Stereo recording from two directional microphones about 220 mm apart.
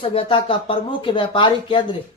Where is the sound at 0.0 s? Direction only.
25° left (ahead or behind).